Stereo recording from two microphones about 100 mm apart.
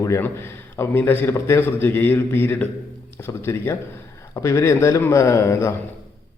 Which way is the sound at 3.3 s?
35° left (ahead or behind).